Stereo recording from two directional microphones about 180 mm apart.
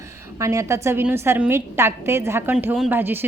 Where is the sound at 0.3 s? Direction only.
15° right (ahead or behind).